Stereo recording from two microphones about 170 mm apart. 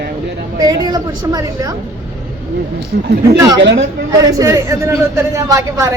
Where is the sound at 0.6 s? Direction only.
25° right (ahead or behind).